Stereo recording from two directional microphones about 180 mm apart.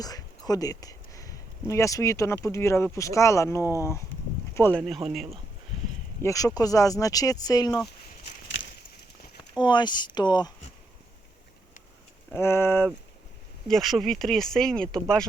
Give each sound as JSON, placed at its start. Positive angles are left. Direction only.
{"t": 0.0, "sound": "speech", "side_deg": 20}
{"t": 5.0, "sound": "speech", "side_deg": 0}
{"t": 6.2, "sound": "speech", "side_deg": 20}
{"t": 9.6, "sound": "speech", "side_deg": 25}
{"t": 12.3, "sound": "speech", "side_deg": 15}
{"t": 13.7, "sound": "speech", "side_deg": 0}